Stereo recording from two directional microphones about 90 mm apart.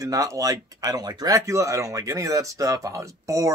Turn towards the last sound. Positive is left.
turn(degrees=-35)  # may be behind; listen again after turning